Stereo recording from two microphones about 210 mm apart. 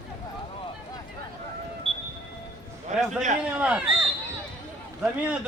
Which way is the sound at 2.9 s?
35° right (ahead or behind).